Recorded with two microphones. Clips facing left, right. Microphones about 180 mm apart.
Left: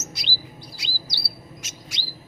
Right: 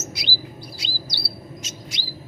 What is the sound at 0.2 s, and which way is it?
Bird, 10° right (ahead or behind).